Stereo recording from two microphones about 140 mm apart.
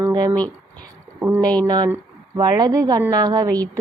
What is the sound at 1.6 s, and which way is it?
A woman's voice, 30° right (ahead or behind).